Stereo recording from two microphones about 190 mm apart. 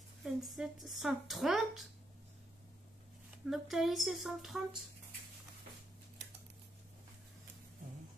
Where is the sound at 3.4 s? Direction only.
Centre (ahead or behind).